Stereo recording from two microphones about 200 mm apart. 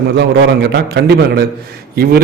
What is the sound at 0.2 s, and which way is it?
A man's voice, 60° right (ahead or behind).